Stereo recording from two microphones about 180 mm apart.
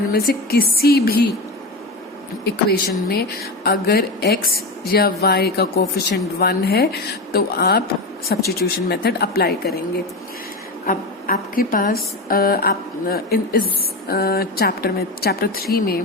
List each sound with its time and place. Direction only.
0.1 s speech: 55° left (ahead or behind)
2.4 s speech: 60° left (ahead or behind)
10.8 s speech: 50° left (ahead or behind)